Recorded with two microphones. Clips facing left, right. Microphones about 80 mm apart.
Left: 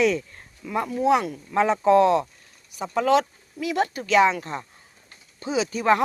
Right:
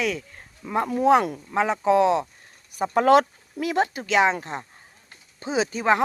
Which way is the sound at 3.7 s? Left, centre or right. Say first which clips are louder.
Left 2 dB; right.